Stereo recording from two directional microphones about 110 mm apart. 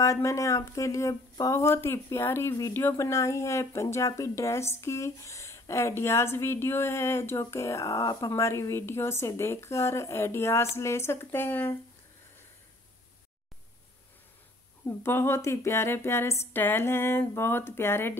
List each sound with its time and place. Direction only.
0.0 s speech: 30° left (ahead or behind)
14.9 s speech: 25° left (ahead or behind)